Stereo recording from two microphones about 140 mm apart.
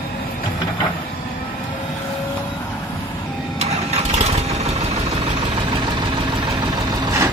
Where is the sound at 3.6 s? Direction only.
50° right (ahead or behind).